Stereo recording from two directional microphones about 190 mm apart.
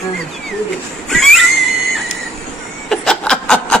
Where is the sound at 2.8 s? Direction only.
5° left (ahead or behind).